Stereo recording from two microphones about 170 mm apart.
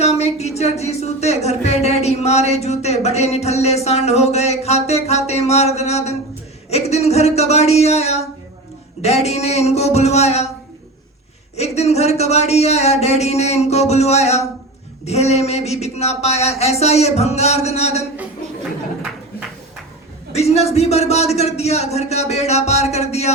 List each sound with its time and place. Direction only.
0.0 s speech: 40° left (ahead or behind)
11.5 s speech: 40° left (ahead or behind)
20.3 s speech: 40° left (ahead or behind)